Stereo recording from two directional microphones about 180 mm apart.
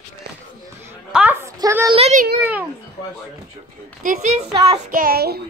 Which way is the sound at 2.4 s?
10° right (ahead or behind).